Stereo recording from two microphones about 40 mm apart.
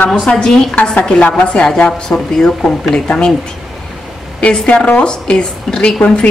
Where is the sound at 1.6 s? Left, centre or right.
Centre.